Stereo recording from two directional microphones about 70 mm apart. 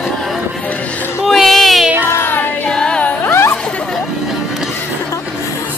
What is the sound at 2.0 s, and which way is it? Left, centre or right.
Child singing, left.